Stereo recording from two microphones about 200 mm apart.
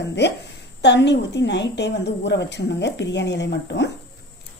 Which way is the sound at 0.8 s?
60° left (ahead or behind).